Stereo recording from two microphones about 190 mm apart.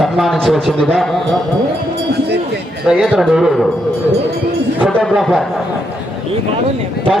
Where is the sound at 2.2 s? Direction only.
65° right (ahead or behind).